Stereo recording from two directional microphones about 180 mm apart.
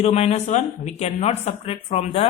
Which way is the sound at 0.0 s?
35° left (ahead or behind).